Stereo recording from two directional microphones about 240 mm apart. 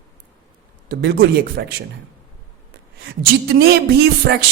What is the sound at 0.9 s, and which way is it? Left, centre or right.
Speech, right.